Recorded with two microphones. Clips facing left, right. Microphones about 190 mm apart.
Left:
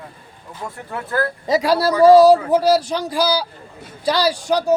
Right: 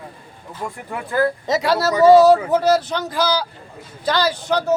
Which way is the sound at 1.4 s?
10° left (ahead or behind).